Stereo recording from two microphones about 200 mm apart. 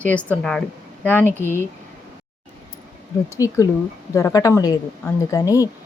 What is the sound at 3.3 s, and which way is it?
Speech, 15° left (ahead or behind).